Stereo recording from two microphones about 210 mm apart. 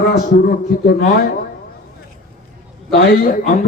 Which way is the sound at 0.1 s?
45° left (ahead or behind).